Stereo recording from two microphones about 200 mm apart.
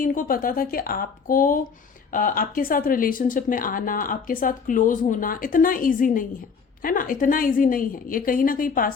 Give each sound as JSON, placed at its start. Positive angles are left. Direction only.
{"t": 0.0, "sound": "speech", "side_deg": 45}